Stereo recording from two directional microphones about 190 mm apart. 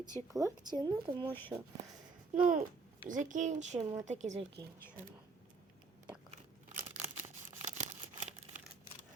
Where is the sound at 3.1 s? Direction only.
40° right (ahead or behind).